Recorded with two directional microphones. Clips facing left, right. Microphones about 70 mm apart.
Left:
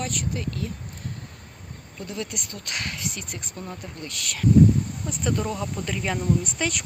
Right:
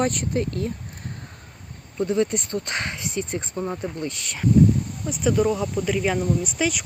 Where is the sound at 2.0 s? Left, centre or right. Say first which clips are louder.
Right 11 dB; right.